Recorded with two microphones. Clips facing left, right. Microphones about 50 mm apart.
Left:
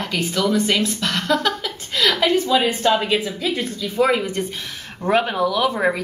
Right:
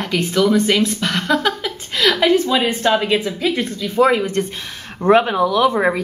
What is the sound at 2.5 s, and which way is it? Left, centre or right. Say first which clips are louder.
Speech: right 1 dB; centre.